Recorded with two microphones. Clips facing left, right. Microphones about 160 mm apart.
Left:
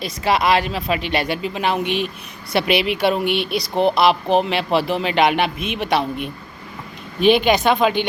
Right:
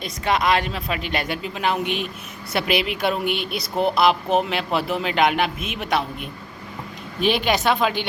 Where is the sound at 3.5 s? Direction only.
Centre (ahead or behind).